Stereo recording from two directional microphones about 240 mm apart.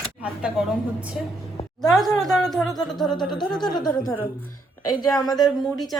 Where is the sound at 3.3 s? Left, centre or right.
Centre.